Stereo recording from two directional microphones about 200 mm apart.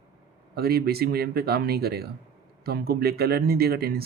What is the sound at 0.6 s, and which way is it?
Speech, 50° right (ahead or behind).